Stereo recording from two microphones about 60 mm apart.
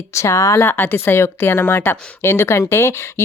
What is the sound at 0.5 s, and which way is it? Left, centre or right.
A woman's voice, left.